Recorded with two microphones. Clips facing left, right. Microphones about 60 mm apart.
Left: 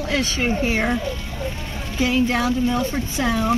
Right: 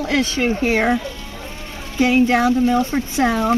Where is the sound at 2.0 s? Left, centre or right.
Right.